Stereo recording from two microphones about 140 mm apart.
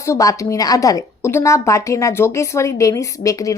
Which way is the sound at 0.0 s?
20° left (ahead or behind).